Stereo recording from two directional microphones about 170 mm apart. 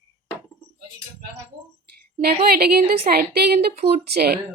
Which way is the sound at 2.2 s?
65° right (ahead or behind).